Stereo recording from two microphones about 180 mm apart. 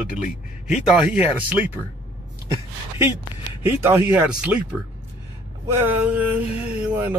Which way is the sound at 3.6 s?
10° right (ahead or behind).